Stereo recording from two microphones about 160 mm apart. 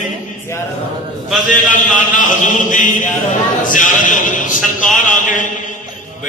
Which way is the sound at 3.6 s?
55° left (ahead or behind).